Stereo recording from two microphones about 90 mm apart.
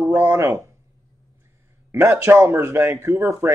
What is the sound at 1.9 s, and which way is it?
Speech, 30° right (ahead or behind).